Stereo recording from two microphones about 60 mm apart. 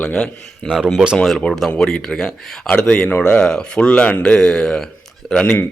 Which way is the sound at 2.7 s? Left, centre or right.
Centre.